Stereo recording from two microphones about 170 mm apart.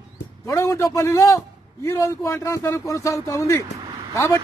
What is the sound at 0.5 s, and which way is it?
A man's voice, 20° left (ahead or behind).